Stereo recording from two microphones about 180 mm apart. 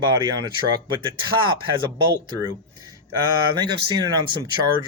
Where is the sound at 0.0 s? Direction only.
20° right (ahead or behind).